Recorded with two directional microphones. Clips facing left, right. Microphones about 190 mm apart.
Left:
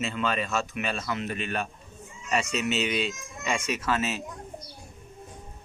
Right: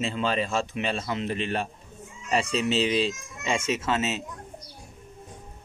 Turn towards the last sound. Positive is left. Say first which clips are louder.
# right 2 dB
turn(degrees=-25)  # may be behind; listen again after turning